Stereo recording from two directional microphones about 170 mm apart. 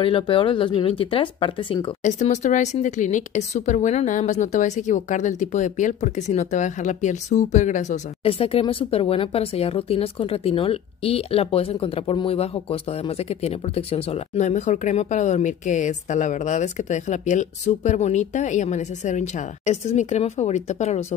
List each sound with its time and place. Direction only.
0.0 s speech: 30° left (ahead or behind)
2.0 s speech: 45° left (ahead or behind)